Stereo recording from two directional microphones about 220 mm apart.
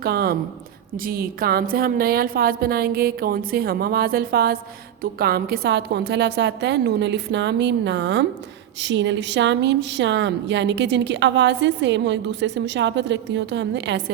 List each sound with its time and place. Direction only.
0.0 s a woman's voice: 45° right (ahead or behind)